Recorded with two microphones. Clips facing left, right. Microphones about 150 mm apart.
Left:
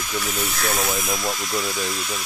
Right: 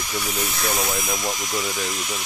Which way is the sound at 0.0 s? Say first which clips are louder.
Left 1 dB; 10° right (ahead or behind).